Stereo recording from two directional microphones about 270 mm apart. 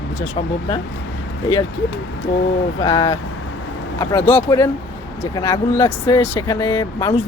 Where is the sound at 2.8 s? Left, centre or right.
Centre.